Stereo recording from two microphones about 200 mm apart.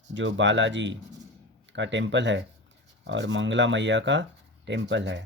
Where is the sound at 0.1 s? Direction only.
65° right (ahead or behind).